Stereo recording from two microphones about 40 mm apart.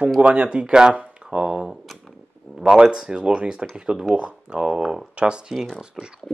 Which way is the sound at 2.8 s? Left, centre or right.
Right.